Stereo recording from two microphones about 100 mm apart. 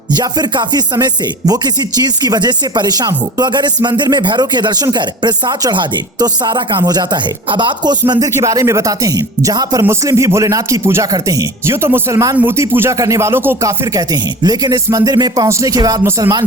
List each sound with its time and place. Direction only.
0.2 s speech: 45° right (ahead or behind)
2.2 s speech: 45° right (ahead or behind)
8.1 s speech: 35° right (ahead or behind)
12.4 s speech: 20° right (ahead or behind); by 16.0 s 40° right (ahead or behind)